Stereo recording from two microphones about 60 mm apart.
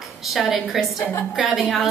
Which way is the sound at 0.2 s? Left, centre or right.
Centre.